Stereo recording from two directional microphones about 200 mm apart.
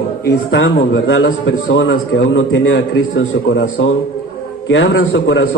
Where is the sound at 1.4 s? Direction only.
70° left (ahead or behind).